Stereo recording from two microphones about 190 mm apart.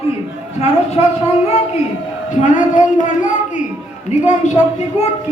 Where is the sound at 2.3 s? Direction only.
40° left (ahead or behind).